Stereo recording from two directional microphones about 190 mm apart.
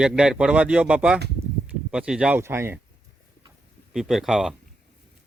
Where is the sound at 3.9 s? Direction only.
Centre (ahead or behind).